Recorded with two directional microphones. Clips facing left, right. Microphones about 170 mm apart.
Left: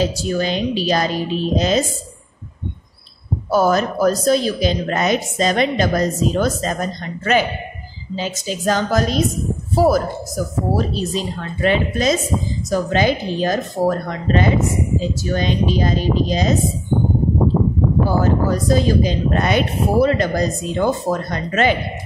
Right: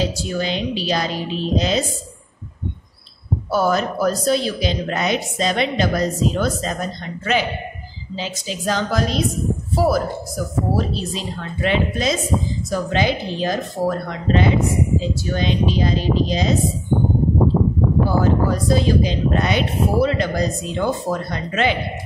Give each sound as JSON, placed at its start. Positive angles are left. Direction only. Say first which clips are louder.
{"t": 0.0, "sound": "speech", "louder": "left 3 dB", "side_deg": 45}
{"t": 3.4, "sound": "speech", "louder": "left 3 dB", "side_deg": 45}
{"t": 18.0, "sound": "speech", "louder": "even", "side_deg": 45}